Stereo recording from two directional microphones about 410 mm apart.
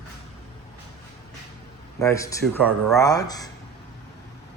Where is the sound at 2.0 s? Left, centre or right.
Centre.